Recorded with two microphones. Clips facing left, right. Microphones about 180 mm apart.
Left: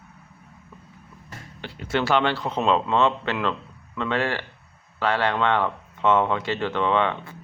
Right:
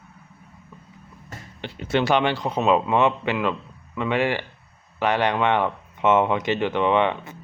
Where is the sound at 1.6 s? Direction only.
20° right (ahead or behind).